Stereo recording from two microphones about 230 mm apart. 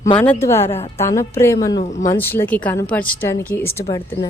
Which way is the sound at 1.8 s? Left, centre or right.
Left.